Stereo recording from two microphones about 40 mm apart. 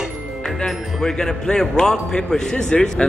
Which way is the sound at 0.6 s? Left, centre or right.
Centre.